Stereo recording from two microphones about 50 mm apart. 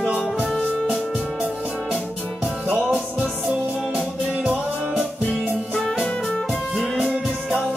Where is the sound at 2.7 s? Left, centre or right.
Right.